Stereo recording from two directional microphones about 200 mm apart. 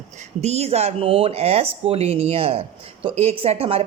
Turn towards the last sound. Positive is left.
turn(degrees=-30)  # may be behind; listen again after turning